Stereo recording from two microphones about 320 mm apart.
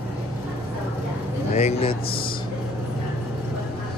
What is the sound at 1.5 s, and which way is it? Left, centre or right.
Speech, centre.